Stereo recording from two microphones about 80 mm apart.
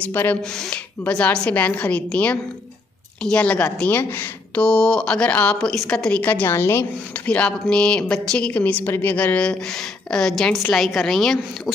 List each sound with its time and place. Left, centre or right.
0.0 s a woman's voice: left
4.6 s a woman's voice: centre; by 6.9 s left
7.2 s a woman's voice: centre